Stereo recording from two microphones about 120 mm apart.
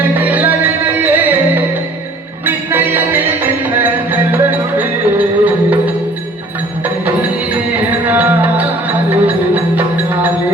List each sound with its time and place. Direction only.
0.0 s music: 15° right (ahead or behind)
7.0 s music: 15° right (ahead or behind)